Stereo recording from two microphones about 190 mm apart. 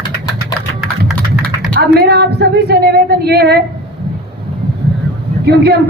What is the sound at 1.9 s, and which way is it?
A woman's voice, 60° right (ahead or behind).